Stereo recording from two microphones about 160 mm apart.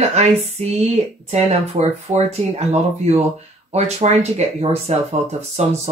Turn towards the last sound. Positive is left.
turn(degrees=-45)  # may be behind; listen again after turning